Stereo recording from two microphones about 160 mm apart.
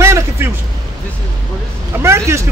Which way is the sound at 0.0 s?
15° right (ahead or behind).